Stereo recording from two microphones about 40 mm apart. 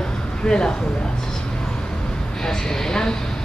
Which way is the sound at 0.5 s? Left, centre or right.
Centre.